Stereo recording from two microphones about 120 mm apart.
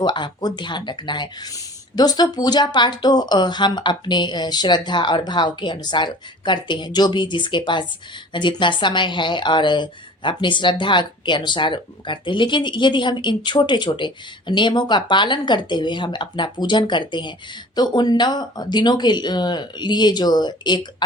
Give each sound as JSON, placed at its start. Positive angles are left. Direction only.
{"t": 0.0, "sound": "a woman's voice", "side_deg": 35}